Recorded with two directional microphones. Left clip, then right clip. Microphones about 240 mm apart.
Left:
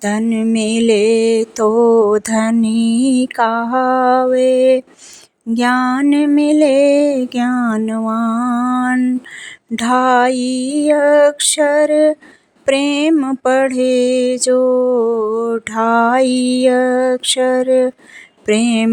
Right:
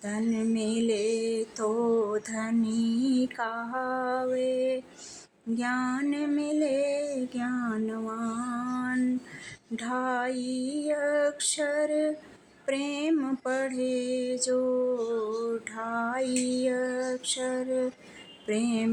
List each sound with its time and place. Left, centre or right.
0.0 s mantra: left
15.4 s female singing: left
18.4 s mantra: left